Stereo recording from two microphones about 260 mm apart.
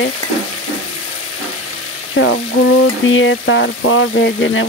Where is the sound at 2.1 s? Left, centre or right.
Left.